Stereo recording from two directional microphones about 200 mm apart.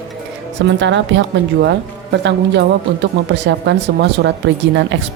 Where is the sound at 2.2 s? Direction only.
60° right (ahead or behind).